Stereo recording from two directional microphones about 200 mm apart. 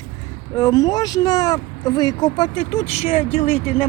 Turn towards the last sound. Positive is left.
turn(degrees=30)  # may be behind; listen again after turning